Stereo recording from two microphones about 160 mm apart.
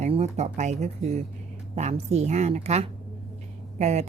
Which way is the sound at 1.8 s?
45° right (ahead or behind).